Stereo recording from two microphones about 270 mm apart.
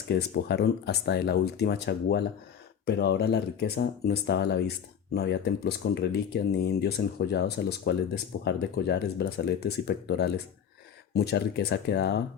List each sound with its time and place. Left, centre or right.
0.1 s speech: left